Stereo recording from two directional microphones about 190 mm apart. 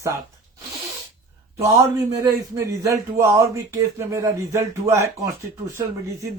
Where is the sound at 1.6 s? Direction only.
15° right (ahead or behind).